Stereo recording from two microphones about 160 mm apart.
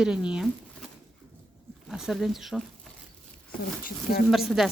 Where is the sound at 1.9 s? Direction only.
Centre (ahead or behind).